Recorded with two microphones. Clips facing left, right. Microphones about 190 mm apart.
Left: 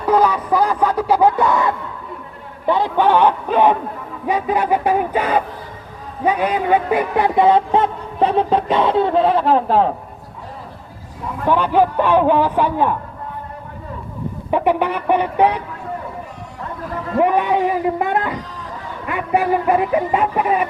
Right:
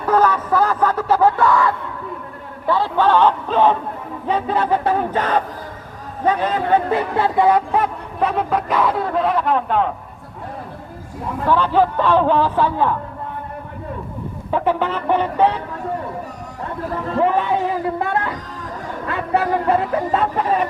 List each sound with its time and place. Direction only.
0.1 s a sound: 15° left (ahead or behind)
2.6 s a man's voice: 15° left (ahead or behind); by 9.9 s 35° left (ahead or behind)
11.4 s a man's voice: 15° left (ahead or behind)
14.5 s a man's voice: 15° left (ahead or behind)
17.2 s a man's voice: 15° left (ahead or behind)